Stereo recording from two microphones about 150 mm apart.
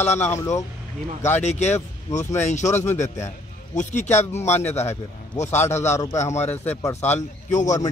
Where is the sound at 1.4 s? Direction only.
50° left (ahead or behind).